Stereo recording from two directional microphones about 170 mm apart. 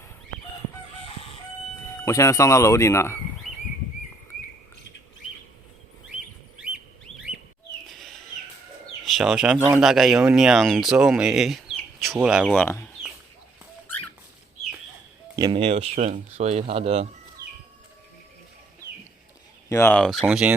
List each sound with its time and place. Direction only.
1.9 s speech: 15° left (ahead or behind)
7.9 s bird: centre (ahead or behind)
9.0 s speech: centre (ahead or behind)
12.5 s speech: 15° left (ahead or behind)
15.4 s speech: 30° right (ahead or behind)
19.6 s a sound: 15° left (ahead or behind)
19.9 s speech: centre (ahead or behind)
20.2 s speech: 10° right (ahead or behind)